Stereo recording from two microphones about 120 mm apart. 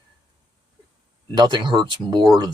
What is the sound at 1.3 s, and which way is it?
Speech, 40° right (ahead or behind).